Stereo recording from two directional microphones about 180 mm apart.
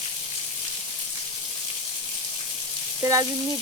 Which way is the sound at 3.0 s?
20° right (ahead or behind).